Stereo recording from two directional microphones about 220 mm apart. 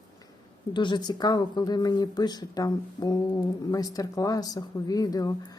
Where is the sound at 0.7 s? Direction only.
20° left (ahead or behind).